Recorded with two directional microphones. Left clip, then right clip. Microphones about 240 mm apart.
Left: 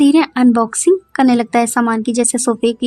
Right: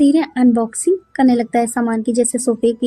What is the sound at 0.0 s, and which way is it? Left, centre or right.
A woman's voice, left.